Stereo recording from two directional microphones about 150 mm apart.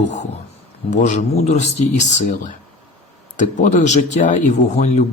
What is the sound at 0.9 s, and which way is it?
Speech, 55° left (ahead or behind).